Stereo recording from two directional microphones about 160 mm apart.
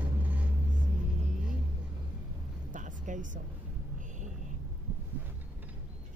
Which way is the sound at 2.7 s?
50° right (ahead or behind).